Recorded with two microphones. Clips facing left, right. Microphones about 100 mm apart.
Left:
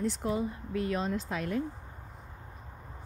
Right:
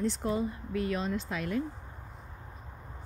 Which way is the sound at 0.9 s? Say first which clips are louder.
Left 1 dB; 35° left (ahead or behind).